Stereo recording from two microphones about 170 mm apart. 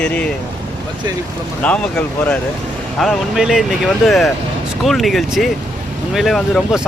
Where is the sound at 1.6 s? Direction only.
5° left (ahead or behind).